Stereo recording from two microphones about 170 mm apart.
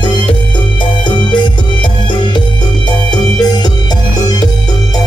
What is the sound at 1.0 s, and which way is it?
Music, 25° left (ahead or behind).